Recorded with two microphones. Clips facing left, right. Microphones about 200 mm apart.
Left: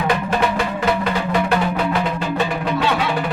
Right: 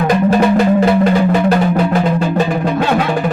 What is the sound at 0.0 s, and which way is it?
Music, 40° right (ahead or behind).